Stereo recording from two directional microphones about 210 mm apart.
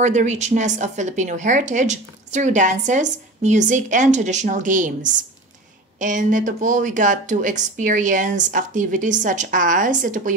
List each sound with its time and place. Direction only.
0.0 s a woman's voice: 35° right (ahead or behind)